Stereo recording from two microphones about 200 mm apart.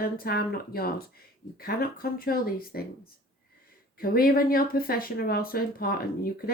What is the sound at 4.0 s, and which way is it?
Speech, 50° left (ahead or behind).